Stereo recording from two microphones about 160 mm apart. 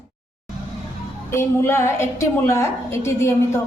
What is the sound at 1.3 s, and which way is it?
A woman's voice, 15° left (ahead or behind).